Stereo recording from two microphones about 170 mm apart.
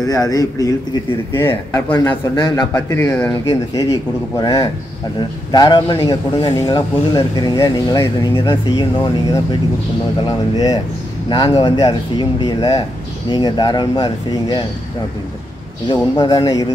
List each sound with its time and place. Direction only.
0.0 s speech: 20° left (ahead or behind)
2.0 s speech: 25° left (ahead or behind)
15.9 s speech: 25° left (ahead or behind)